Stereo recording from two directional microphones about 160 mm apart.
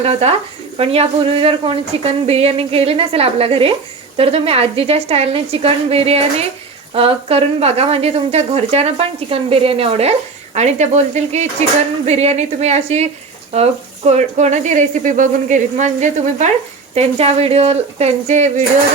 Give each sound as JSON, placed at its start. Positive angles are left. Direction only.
{"t": 0.0, "sound": "speech", "side_deg": -40}